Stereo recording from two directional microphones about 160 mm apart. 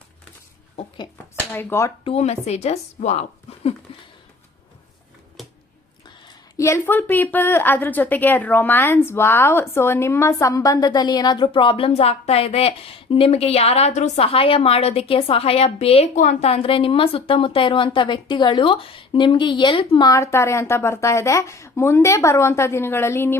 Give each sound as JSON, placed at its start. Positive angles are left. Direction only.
{"t": 1.5, "sound": "speech", "side_deg": 15}
{"t": 2.0, "sound": "speech", "side_deg": 40}
{"t": 6.6, "sound": "a woman's voice", "side_deg": 15}